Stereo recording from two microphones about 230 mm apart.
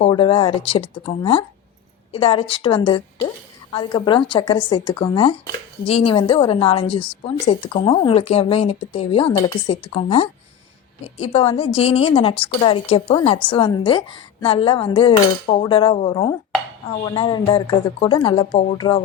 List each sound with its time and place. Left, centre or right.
0.0 s speech: left